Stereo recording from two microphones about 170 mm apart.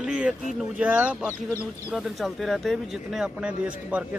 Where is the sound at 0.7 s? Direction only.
5° right (ahead or behind).